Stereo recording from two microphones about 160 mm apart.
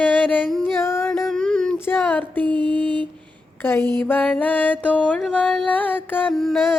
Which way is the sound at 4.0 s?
10° left (ahead or behind).